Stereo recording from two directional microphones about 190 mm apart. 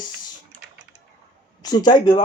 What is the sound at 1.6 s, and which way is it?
Speech, 20° left (ahead or behind).